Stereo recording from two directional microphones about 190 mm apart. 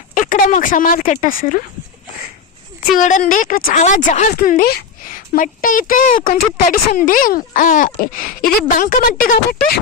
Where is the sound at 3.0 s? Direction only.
40° left (ahead or behind).